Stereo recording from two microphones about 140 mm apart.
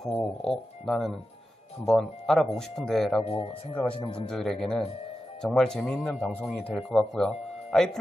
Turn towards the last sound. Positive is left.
turn(degrees=5)  # may be behind; listen again after turning